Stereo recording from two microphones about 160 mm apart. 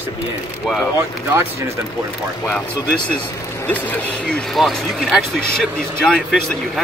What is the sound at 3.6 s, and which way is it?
Speech, 10° left (ahead or behind).